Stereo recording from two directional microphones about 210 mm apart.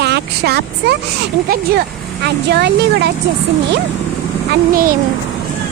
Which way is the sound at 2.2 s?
50° right (ahead or behind).